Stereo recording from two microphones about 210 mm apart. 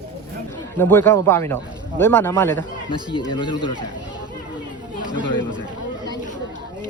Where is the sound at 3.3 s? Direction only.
20° left (ahead or behind).